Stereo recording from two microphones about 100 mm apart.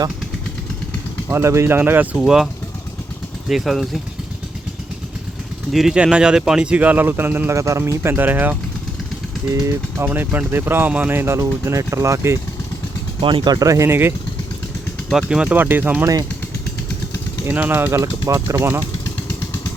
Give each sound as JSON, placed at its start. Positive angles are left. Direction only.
{"t": 1.3, "sound": "speech", "side_deg": -25}
{"t": 2.1, "sound": "speech", "side_deg": -5}
{"t": 3.5, "sound": "speech", "side_deg": 0}
{"t": 5.7, "sound": "speech", "side_deg": -5}
{"t": 9.5, "sound": "speech", "side_deg": -30}
{"t": 13.2, "sound": "speech", "side_deg": -50}
{"t": 15.3, "sound": "speech", "side_deg": -10}
{"t": 15.5, "sound": "speech", "side_deg": -20}
{"t": 17.4, "sound": "speech", "side_deg": -20}